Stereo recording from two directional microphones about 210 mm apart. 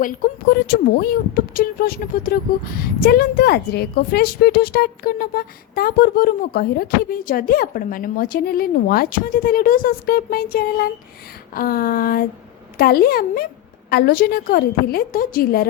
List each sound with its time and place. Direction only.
0.5 s speech: 50° left (ahead or behind)